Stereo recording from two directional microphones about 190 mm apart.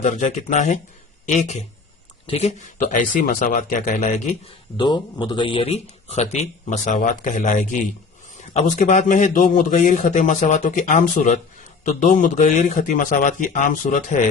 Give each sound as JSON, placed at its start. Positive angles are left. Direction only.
{"t": 0.0, "sound": "a man's voice", "side_deg": 40}
{"t": 4.8, "sound": "a man's voice", "side_deg": 25}